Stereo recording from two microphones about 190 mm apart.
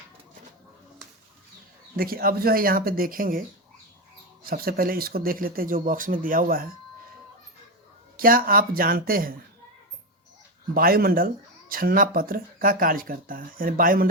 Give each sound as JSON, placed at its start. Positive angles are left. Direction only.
{"t": 2.0, "sound": "speech", "side_deg": -50}
{"t": 4.4, "sound": "speech", "side_deg": -50}
{"t": 8.1, "sound": "speech", "side_deg": -50}
{"t": 10.8, "sound": "speech", "side_deg": -50}